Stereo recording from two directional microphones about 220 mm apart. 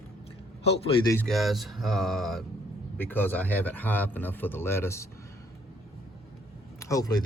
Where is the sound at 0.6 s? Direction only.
25° left (ahead or behind).